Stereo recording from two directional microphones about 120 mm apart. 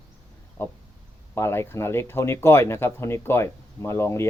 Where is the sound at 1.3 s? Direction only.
20° left (ahead or behind).